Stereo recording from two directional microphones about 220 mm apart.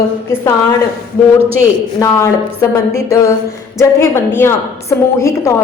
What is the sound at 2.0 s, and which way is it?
A woman's voice, 15° left (ahead or behind).